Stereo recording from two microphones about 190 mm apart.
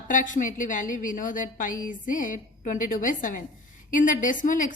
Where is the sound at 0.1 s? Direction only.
45° left (ahead or behind).